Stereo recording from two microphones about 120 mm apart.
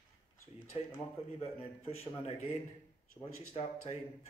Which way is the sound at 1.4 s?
55° left (ahead or behind).